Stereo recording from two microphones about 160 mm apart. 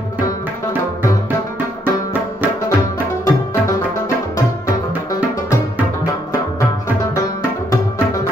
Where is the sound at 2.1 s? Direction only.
10° right (ahead or behind).